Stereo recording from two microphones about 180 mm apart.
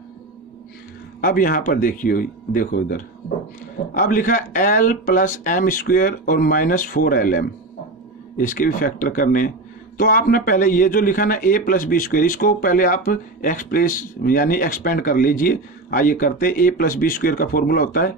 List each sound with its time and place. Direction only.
1.2 s speech: 50° left (ahead or behind)